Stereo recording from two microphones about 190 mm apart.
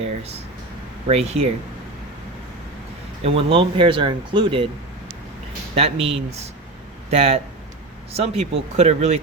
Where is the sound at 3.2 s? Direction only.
30° right (ahead or behind).